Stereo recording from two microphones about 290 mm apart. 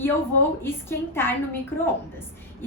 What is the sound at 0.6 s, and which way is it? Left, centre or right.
Speech, centre.